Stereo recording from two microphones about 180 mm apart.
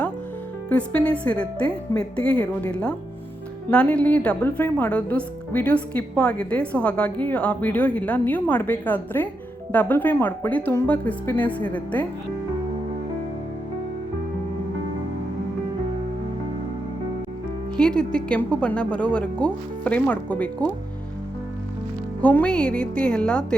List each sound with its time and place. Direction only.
0.7 s a woman's voice: 5° left (ahead or behind)
17.7 s a woman's voice: 5° left (ahead or behind)
22.2 s a woman's voice: 10° left (ahead or behind)